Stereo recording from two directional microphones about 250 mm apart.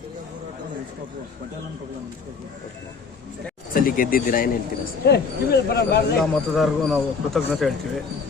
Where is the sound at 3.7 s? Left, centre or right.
Left.